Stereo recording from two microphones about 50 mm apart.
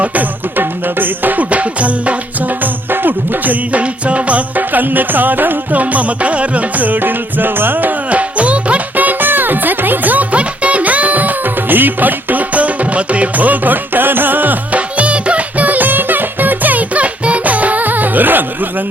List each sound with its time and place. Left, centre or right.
0.0 s music: right
2.9 s music: right